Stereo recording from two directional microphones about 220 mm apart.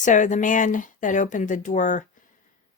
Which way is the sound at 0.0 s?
35° left (ahead or behind).